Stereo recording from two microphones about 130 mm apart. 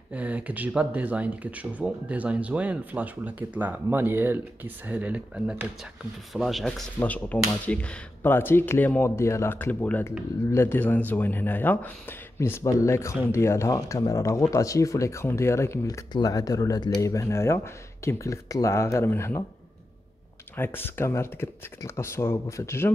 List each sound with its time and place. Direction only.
0.1 s speech: 10° right (ahead or behind)
7.0 s a man's voice: 10° left (ahead or behind)
20.5 s speech: 15° left (ahead or behind)